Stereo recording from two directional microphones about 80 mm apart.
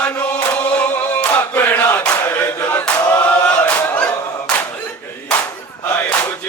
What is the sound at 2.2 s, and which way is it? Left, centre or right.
Chant, left.